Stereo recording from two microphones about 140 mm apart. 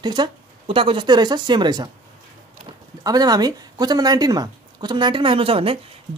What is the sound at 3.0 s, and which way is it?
Speech, 25° right (ahead or behind).